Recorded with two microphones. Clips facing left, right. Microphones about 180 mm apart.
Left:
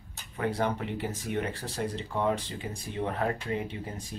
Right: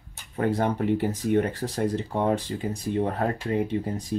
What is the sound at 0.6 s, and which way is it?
Speech, 40° right (ahead or behind).